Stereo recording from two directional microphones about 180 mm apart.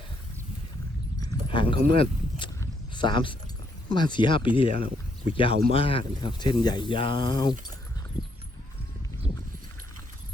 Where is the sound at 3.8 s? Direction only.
25° left (ahead or behind).